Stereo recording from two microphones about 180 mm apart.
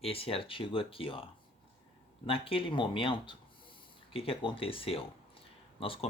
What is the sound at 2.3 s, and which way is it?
Speech, 30° left (ahead or behind).